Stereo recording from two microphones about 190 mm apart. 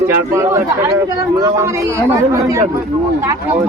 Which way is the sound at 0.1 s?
15° right (ahead or behind).